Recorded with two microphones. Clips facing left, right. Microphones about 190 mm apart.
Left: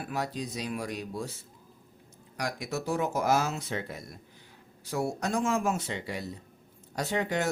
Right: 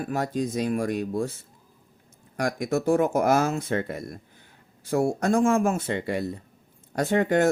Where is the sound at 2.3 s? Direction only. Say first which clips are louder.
Right 8 dB; 50° right (ahead or behind).